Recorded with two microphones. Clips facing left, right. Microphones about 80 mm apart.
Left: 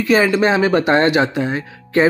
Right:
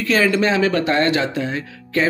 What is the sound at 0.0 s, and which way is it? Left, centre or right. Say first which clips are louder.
Speech: left 3 dB; centre.